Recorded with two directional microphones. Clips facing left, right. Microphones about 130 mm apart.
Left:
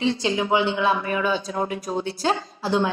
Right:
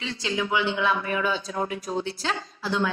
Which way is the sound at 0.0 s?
25° left (ahead or behind).